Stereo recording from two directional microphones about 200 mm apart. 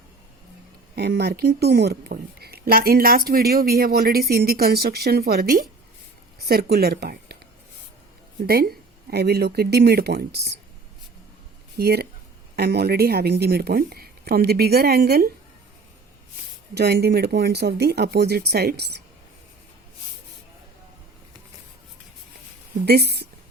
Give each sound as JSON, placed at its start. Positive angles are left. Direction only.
{"t": 0.9, "sound": "a woman's voice", "side_deg": -55}
{"t": 8.4, "sound": "a woman's voice", "side_deg": -50}
{"t": 11.8, "sound": "a woman's voice", "side_deg": -50}
{"t": 16.7, "sound": "speech", "side_deg": -55}
{"t": 22.9, "sound": "speech", "side_deg": -55}